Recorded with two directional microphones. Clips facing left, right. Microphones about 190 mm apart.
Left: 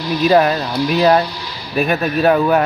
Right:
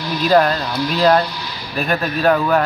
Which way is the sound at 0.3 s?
10° left (ahead or behind).